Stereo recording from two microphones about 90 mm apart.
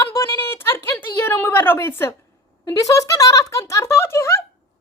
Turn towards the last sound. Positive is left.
turn(degrees=30)  # may be behind; listen again after turning